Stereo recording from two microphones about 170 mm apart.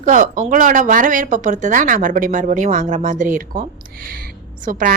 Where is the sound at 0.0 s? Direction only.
50° right (ahead or behind).